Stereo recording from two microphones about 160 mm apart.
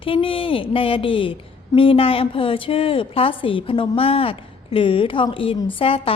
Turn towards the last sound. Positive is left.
turn(degrees=35)  # may be behind; listen again after turning